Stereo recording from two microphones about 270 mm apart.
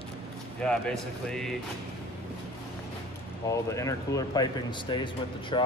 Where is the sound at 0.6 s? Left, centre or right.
Centre.